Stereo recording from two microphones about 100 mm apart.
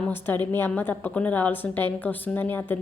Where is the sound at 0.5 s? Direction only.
20° left (ahead or behind).